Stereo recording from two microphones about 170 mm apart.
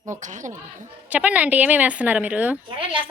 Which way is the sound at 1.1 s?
10° right (ahead or behind).